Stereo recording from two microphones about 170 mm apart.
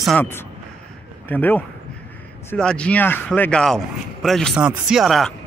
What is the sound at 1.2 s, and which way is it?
Speech, 10° left (ahead or behind).